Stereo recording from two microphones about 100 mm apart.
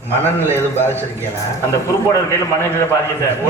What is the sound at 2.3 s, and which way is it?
Speech, 25° left (ahead or behind).